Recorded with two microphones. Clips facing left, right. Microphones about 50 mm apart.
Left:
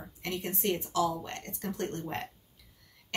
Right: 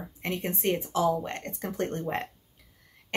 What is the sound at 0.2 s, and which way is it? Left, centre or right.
Speech, right.